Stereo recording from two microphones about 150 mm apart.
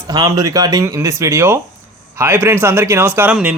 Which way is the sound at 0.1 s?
25° right (ahead or behind).